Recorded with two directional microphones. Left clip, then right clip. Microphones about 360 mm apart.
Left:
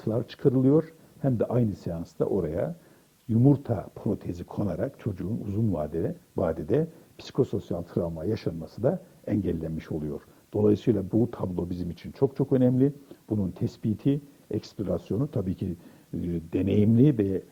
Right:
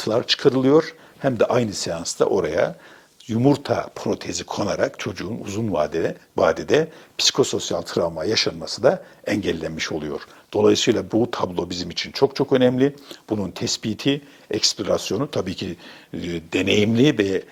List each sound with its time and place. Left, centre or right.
0.0 s speech: centre
8.0 s speech: centre
8.3 s speech: centre
11.4 s speech: centre
11.7 s speech: centre